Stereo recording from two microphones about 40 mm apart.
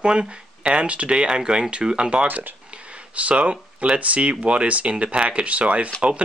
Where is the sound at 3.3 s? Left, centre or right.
Right.